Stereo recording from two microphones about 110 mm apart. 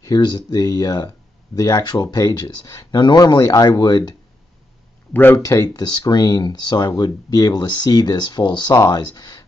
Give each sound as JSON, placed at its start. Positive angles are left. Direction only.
{"t": 0.0, "sound": "speech", "side_deg": 40}
{"t": 5.1, "sound": "speech", "side_deg": 20}
{"t": 5.4, "sound": "speech", "side_deg": 30}